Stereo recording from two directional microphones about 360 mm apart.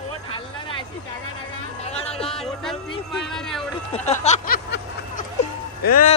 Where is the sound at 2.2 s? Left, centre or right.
Centre.